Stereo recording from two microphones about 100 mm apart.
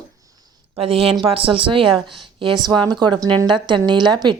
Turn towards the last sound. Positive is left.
turn(degrees=-50)  # may be behind; listen again after turning